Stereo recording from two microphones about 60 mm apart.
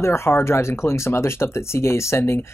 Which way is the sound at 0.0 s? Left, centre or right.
Left.